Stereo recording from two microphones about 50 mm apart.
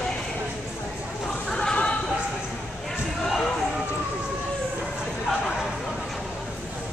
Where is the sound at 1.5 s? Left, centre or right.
Centre.